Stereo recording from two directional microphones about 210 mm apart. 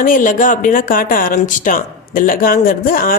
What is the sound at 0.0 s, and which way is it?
Speech, 40° left (ahead or behind).